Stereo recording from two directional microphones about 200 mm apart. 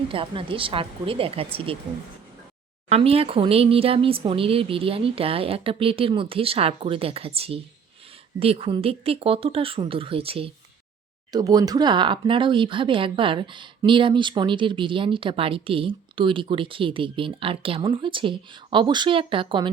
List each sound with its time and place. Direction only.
0.1 s speech: 25° right (ahead or behind)
2.9 s speech: 30° right (ahead or behind)